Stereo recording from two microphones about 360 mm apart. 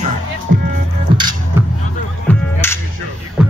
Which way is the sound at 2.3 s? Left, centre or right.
Centre.